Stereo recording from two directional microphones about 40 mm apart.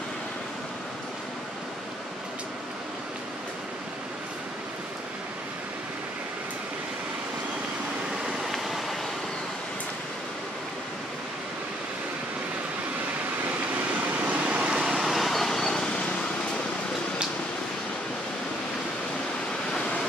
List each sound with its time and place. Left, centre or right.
8.3 s vehicle: centre
14.1 s vehicle: right
14.8 s vehicle: centre